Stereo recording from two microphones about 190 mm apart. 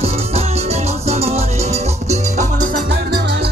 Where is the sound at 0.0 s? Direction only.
35° right (ahead or behind).